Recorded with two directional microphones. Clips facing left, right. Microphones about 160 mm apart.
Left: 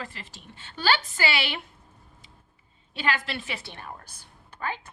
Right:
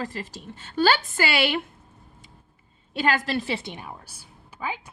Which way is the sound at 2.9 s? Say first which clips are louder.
Right 5 dB; 45° right (ahead or behind).